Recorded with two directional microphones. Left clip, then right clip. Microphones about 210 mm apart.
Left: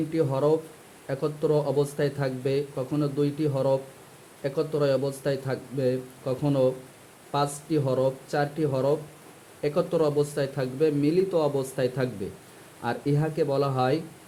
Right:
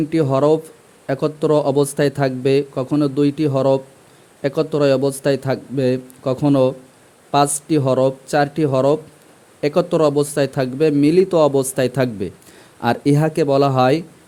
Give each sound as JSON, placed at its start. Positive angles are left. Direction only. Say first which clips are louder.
{"t": 0.1, "sound": "a man's voice", "louder": "right 8 dB", "side_deg": -50}